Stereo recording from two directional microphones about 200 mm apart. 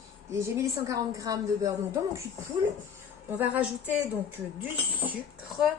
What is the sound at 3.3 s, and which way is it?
Speech, 10° right (ahead or behind).